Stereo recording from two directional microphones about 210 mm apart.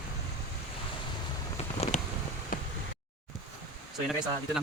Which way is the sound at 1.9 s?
35° left (ahead or behind).